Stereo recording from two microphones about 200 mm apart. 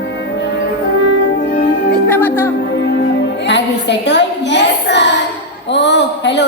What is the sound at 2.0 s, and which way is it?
Music, 10° left (ahead or behind).